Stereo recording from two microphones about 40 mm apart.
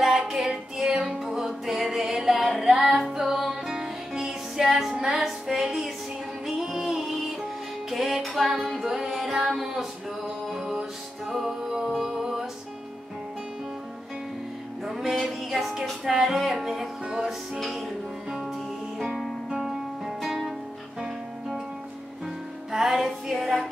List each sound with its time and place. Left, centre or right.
0.0 s music: centre
2.9 s music: centre
8.2 s female singing: centre
8.8 s music: centre
14.9 s music: centre
19.6 s music: centre
22.7 s music: centre